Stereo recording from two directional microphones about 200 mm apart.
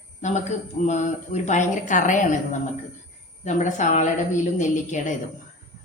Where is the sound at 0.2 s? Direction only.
35° left (ahead or behind).